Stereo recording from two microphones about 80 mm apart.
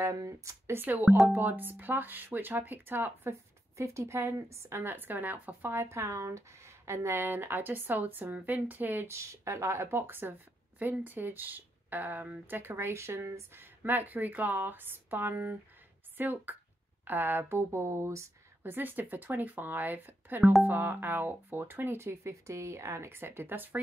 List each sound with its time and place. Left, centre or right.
0.0 s speech: right
0.7 s speech: right
9.1 s speech: right
18.6 s speech: right